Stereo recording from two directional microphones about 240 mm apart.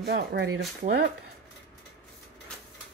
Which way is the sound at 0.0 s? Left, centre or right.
Right.